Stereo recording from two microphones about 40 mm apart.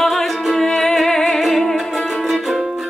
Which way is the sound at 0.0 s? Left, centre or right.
Centre.